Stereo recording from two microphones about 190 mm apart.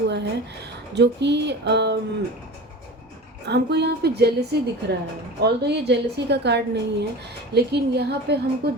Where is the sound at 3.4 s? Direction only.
60° right (ahead or behind).